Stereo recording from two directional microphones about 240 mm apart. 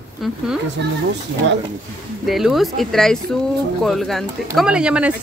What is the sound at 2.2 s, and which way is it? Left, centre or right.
Speech, centre.